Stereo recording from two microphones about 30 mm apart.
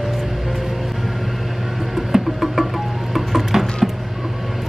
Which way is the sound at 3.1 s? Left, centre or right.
Centre.